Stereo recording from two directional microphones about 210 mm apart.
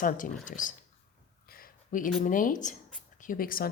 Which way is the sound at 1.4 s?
45° left (ahead or behind).